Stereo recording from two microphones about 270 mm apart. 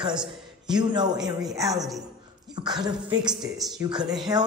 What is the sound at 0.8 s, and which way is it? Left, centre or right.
Speech, centre.